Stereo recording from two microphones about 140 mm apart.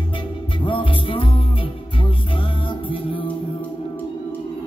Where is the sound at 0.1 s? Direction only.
35° left (ahead or behind).